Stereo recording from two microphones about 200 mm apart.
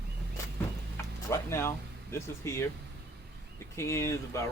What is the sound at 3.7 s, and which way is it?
Speech, 15° left (ahead or behind).